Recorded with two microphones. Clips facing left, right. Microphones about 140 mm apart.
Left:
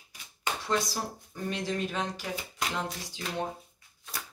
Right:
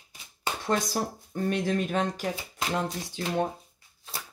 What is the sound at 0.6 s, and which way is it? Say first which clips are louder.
A woman's voice: right 4 dB; 50° right (ahead or behind).